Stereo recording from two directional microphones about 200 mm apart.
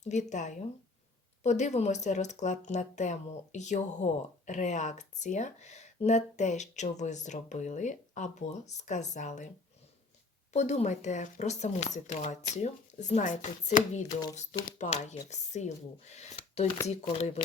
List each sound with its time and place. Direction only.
0.0 s speech: 35° left (ahead or behind)
10.5 s speech: 35° left (ahead or behind)